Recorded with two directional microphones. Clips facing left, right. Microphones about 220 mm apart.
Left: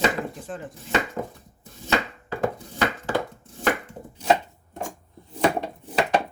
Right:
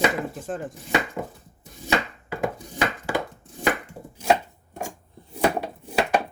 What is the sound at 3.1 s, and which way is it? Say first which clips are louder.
Chopping: left 1 dB; 10° right (ahead or behind).